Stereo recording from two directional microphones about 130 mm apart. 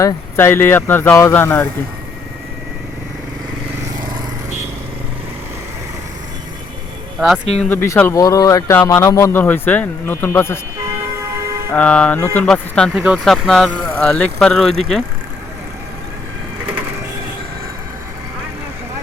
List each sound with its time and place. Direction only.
0.3 s speech: 15° left (ahead or behind)
7.6 s speech: 15° left (ahead or behind)
11.7 s speech: 10° left (ahead or behind)
12.9 s speech: 5° right (ahead or behind)